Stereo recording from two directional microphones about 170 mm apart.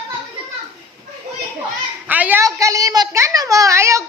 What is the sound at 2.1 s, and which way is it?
A woman's voice, 10° right (ahead or behind).